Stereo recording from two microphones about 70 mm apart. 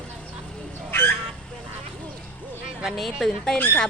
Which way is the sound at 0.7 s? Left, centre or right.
Left.